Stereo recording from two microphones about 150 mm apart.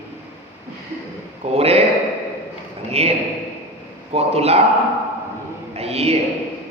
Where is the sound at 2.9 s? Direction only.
45° right (ahead or behind).